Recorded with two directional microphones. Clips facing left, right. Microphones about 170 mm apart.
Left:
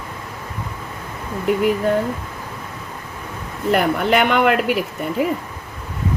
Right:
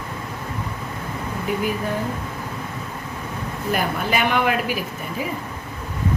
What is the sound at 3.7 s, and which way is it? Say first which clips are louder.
Speech: left 6 dB; 70° left (ahead or behind).